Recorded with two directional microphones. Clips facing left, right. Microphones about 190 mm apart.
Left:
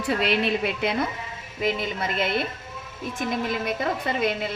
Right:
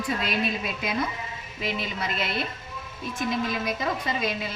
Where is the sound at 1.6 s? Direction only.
50° left (ahead or behind).